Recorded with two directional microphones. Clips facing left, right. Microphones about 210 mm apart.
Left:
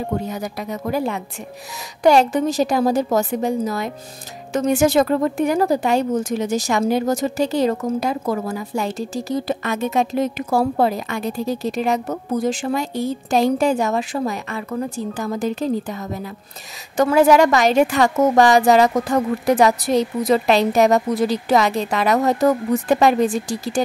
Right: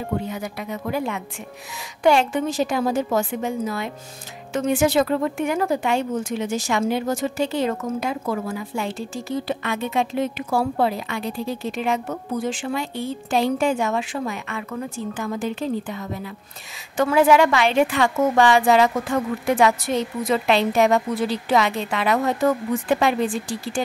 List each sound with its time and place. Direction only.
0.2 s speech: 40° left (ahead or behind)